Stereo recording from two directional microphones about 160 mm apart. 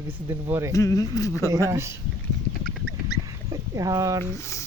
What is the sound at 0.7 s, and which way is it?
Speech, 20° left (ahead or behind).